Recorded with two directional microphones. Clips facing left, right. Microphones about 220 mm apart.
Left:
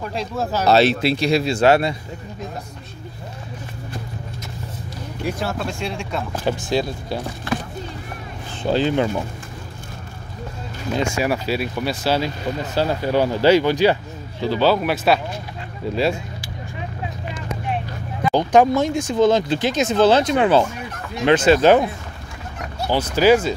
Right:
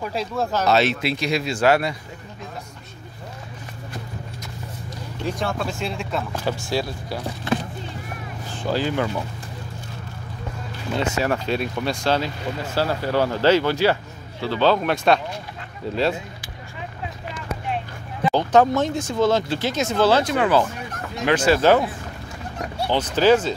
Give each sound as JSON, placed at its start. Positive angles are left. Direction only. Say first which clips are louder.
{"t": 0.1, "sound": "speech", "louder": "even", "side_deg": -5}
{"t": 0.7, "sound": "speech", "louder": "left 6 dB", "side_deg": 35}
{"t": 5.2, "sound": "speech", "louder": "left 1 dB", "side_deg": 5}
{"t": 6.4, "sound": "speech", "louder": "left 6 dB", "side_deg": 20}
{"t": 8.6, "sound": "speech", "louder": "left 4 dB", "side_deg": 25}
{"t": 11.0, "sound": "speech", "louder": "left 1 dB", "side_deg": 10}
{"t": 12.7, "sound": "speech", "louder": "left 2 dB", "side_deg": 15}
{"t": 18.3, "sound": "speech", "louder": "left 2 dB", "side_deg": 15}